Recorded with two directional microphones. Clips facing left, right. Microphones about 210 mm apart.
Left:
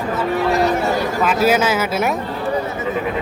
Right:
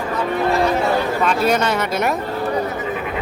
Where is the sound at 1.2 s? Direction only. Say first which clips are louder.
Left 5 dB; 5° left (ahead or behind).